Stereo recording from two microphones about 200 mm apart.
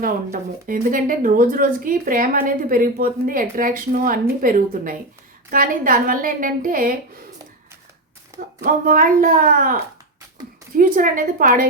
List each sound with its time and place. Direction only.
0.0 s speech: 45° right (ahead or behind)
8.6 s speech: 45° right (ahead or behind)
10.8 s speech: 45° right (ahead or behind)